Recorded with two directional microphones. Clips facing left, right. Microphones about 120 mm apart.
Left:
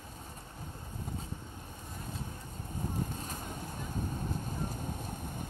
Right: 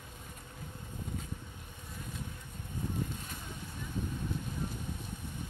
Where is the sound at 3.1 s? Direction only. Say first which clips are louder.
Left 4 dB; 40° left (ahead or behind).